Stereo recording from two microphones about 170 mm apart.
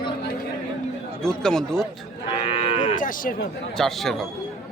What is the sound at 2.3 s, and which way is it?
Cattle, 35° left (ahead or behind).